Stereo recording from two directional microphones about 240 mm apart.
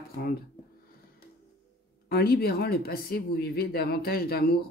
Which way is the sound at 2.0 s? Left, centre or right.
Left.